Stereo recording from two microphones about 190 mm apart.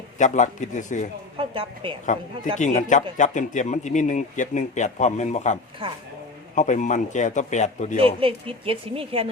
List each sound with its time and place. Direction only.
0.2 s a man's voice: 40° left (ahead or behind)
1.4 s a woman's voice: 25° right (ahead or behind)
2.6 s a man's voice: 40° left (ahead or behind)
5.8 s speech: 25° right (ahead or behind)
6.6 s a man's voice: 40° left (ahead or behind)
8.0 s speech: 30° right (ahead or behind)